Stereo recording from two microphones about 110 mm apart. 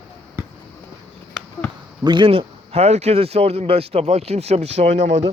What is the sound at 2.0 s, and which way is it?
Speech, 45° right (ahead or behind).